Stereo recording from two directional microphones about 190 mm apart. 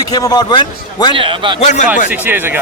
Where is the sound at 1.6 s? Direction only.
40° left (ahead or behind).